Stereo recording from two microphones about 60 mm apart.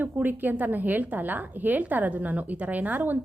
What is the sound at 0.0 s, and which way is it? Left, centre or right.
A woman's voice, right.